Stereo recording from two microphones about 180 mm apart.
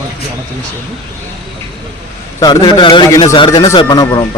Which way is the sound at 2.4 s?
25° left (ahead or behind).